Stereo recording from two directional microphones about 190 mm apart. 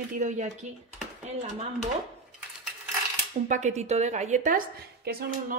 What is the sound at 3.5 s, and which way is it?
A woman's voice, 35° right (ahead or behind).